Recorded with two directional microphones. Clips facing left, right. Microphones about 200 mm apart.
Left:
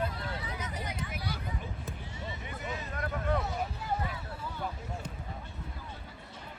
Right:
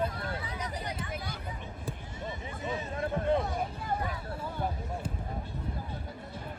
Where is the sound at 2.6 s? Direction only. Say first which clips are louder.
Right 5 dB; 25° right (ahead or behind).